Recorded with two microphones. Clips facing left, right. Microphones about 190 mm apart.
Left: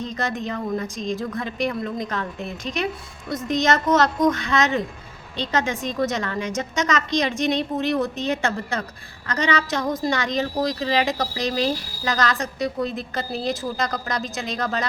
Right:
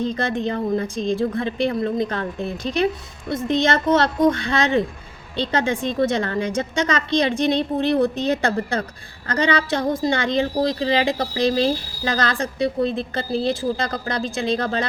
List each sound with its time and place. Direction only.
0.0 s a woman's voice: 30° right (ahead or behind)